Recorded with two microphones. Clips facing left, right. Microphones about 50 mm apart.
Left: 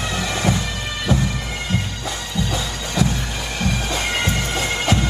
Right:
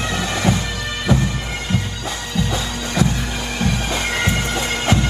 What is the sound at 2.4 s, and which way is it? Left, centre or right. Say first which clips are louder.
Bagpipes: right 2 dB; right.